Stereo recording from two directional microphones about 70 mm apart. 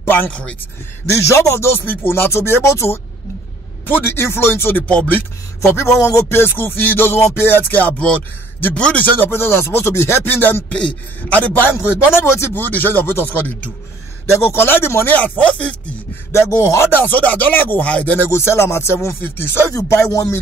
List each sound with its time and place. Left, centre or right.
0.0 s a sound: left
0.3 s a man's voice: centre
1.3 s speech: left
4.8 s music: left
5.8 s speech: left
6.4 s speech: left
10.7 s music: centre
11.7 s speech: left
14.4 s speech: left
15.1 s music: left
16.3 s speech: left
16.9 s music: left
18.3 s speech: left
19.7 s speech: left